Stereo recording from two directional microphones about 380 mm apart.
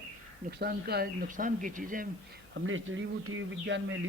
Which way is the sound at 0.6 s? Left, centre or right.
Right.